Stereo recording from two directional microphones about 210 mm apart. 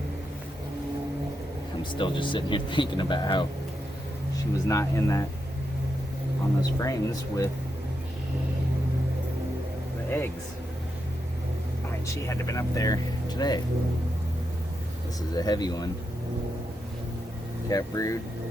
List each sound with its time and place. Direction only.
1.9 s speech: 25° left (ahead or behind)
6.7 s speech: 15° left (ahead or behind)
10.1 s speech: 10° left (ahead or behind)
12.3 s speech: 15° left (ahead or behind)
15.4 s speech: 20° left (ahead or behind)
17.7 s speech: 15° left (ahead or behind)